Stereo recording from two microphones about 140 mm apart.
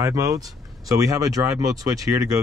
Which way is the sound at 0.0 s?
25° right (ahead or behind).